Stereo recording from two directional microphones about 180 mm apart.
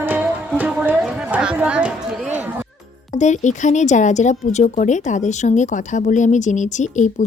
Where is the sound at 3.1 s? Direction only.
40° left (ahead or behind).